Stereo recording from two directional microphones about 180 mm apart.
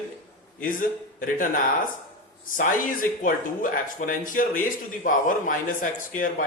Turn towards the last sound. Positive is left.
turn(degrees=50)  # may be behind; listen again after turning